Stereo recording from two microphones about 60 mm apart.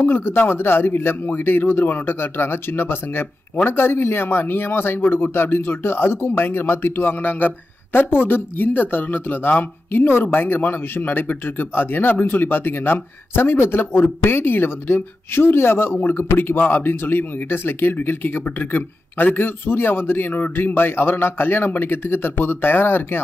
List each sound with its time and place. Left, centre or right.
0.0 s speech: left